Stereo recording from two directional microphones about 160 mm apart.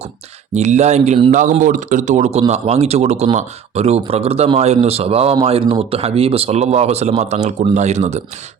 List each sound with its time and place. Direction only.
0.5 s a man's voice: 45° right (ahead or behind)
1.3 s a man's voice: 50° right (ahead or behind)